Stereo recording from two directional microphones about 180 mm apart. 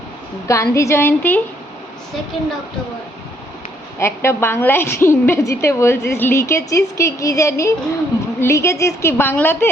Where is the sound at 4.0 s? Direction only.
15° left (ahead or behind).